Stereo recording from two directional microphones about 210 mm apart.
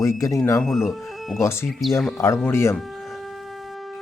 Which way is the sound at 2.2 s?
10° left (ahead or behind).